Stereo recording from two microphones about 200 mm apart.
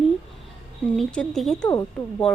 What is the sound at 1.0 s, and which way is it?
Speech, 5° left (ahead or behind).